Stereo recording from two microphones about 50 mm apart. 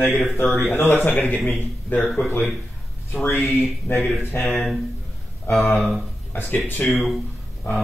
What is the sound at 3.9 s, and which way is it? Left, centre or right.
Speech, left.